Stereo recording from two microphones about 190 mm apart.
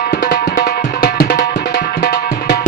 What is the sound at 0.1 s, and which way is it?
Music, 40° left (ahead or behind).